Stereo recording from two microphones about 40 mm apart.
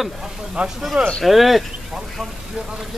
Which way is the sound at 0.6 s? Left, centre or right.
Right.